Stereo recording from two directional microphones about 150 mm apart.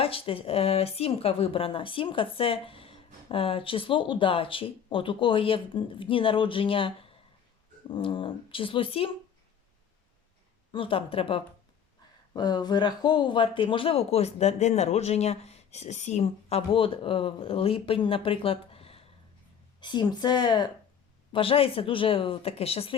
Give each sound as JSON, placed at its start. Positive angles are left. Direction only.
{"t": 0.0, "sound": "speech", "side_deg": 35}
{"t": 10.7, "sound": "a woman's voice", "side_deg": 35}